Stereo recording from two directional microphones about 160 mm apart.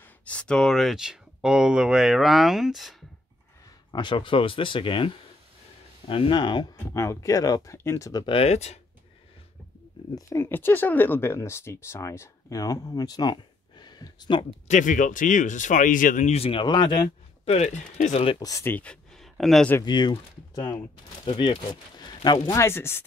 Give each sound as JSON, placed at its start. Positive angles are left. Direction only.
{"t": 0.0, "sound": "speech", "side_deg": 10}
{"t": 3.9, "sound": "speech", "side_deg": 30}
{"t": 6.9, "sound": "speech", "side_deg": 20}
{"t": 8.4, "sound": "speech", "side_deg": 45}
{"t": 10.1, "sound": "speech", "side_deg": 15}
{"t": 14.7, "sound": "speech", "side_deg": 55}
{"t": 17.5, "sound": "speech", "side_deg": 45}
{"t": 18.4, "sound": "speech", "side_deg": 20}
{"t": 19.8, "sound": "speech", "side_deg": 30}
{"t": 22.5, "sound": "speech", "side_deg": 15}